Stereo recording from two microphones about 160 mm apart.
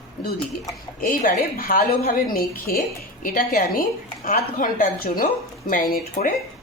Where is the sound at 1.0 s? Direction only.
65° left (ahead or behind).